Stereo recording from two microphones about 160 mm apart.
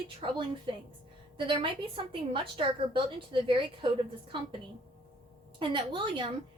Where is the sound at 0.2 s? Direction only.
35° right (ahead or behind).